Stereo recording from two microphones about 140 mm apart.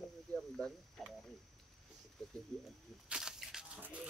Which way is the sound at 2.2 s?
5° left (ahead or behind).